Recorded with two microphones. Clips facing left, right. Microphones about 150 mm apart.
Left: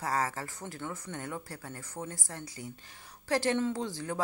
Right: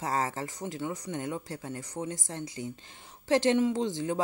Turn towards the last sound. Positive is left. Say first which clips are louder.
# right 5 dB
turn(degrees=-20)  # may be behind; listen again after turning